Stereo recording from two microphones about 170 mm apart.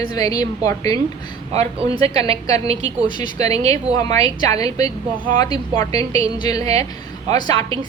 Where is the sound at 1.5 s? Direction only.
35° right (ahead or behind).